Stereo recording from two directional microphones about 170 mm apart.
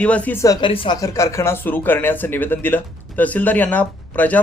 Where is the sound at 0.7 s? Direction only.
30° left (ahead or behind).